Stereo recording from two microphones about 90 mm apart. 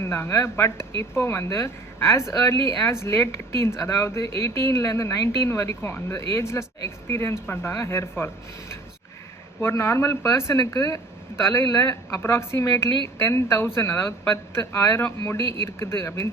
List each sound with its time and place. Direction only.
0.0 s speech: 25° left (ahead or behind)
9.6 s speech: 25° left (ahead or behind)